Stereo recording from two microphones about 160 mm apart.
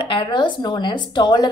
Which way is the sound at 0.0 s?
30° left (ahead or behind).